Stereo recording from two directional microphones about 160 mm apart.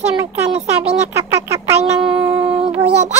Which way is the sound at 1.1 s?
15° right (ahead or behind).